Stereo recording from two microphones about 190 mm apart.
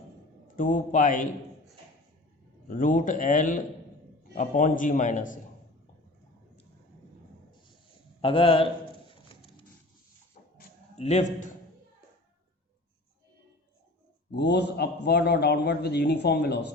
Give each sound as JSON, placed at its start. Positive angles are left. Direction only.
{"t": 0.4, "sound": "a man's voice", "side_deg": 45}
{"t": 2.6, "sound": "a man's voice", "side_deg": 45}
{"t": 8.2, "sound": "a sound", "side_deg": 30}
{"t": 14.3, "sound": "a man's voice", "side_deg": 65}